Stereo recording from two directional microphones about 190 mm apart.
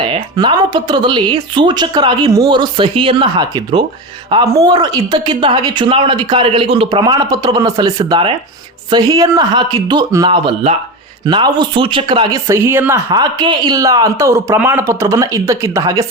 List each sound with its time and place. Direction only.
0.1 s speech: 25° right (ahead or behind)